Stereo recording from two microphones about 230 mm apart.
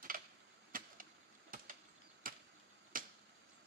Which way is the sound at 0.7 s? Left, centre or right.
Right.